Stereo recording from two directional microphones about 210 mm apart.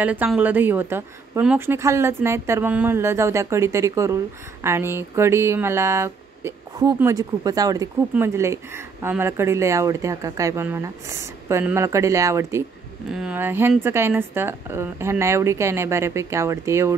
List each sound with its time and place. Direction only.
0.0 s speech: 10° right (ahead or behind)